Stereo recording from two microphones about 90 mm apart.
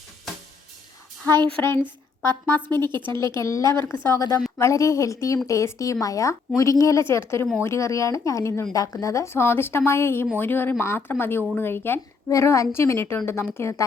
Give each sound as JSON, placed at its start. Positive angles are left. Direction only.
{"t": 1.6, "sound": "a woman's voice", "side_deg": 20}
{"t": 12.3, "sound": "a woman's voice", "side_deg": 35}